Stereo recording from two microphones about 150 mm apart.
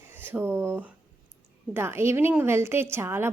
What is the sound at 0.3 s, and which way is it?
A woman's voice, 15° right (ahead or behind).